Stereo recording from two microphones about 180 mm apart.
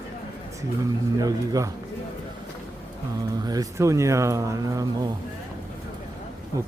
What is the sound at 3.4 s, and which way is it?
Speech, 20° right (ahead or behind).